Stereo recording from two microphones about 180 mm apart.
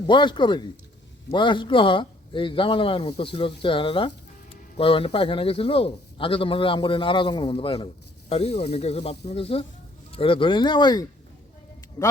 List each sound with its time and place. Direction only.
0.1 s a man's voice: 25° left (ahead or behind)